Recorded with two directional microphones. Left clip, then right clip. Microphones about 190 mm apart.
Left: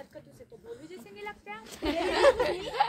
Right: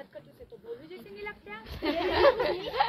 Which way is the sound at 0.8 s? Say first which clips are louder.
Right 1 dB; 45° left (ahead or behind).